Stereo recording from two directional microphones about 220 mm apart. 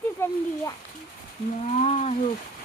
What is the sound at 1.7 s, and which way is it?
Speech, 30° left (ahead or behind).